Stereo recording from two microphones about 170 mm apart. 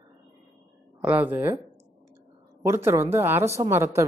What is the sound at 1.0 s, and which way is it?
Speech, 10° right (ahead or behind).